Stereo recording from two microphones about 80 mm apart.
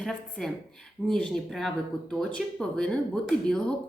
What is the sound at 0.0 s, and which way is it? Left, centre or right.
A woman's voice, centre.